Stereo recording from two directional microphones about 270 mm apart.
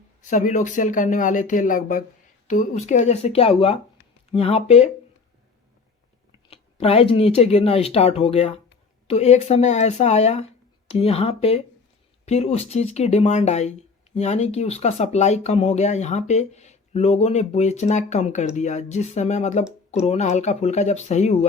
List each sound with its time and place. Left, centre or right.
0.2 s speech: left
6.5 s speech: left